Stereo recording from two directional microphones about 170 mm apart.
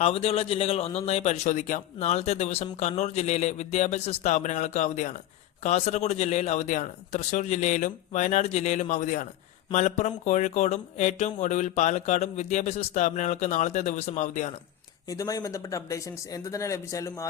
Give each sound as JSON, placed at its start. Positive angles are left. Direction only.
{"t": 0.0, "sound": "speech", "side_deg": 35}
{"t": 15.0, "sound": "speech", "side_deg": 20}